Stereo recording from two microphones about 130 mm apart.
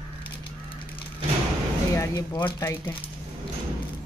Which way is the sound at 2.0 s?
30° left (ahead or behind).